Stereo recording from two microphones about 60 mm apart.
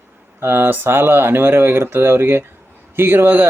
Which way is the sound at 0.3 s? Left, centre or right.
Right.